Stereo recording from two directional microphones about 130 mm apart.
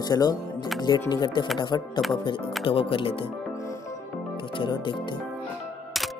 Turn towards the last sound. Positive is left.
turn(degrees=40)  # may be behind; listen again after turning